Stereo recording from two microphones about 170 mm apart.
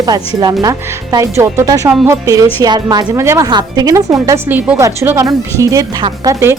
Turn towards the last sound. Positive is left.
turn(degrees=-15)  # may be behind; listen again after turning